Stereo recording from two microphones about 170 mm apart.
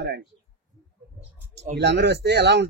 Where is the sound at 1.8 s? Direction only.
85° right.